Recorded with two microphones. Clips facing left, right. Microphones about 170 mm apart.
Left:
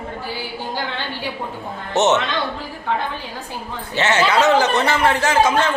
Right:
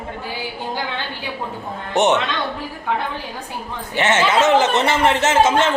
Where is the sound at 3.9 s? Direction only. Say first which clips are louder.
Even; 20° right (ahead or behind).